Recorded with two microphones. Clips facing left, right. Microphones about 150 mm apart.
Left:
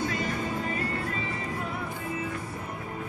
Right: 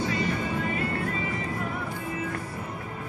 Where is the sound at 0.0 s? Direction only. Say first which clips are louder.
Right 2 dB; 50° left (ahead or behind).